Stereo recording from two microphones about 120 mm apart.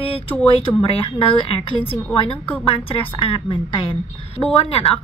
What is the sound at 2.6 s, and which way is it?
A woman's voice, 45° left (ahead or behind).